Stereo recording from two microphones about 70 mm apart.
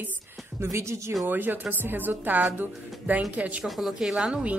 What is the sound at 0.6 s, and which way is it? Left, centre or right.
Speech, right.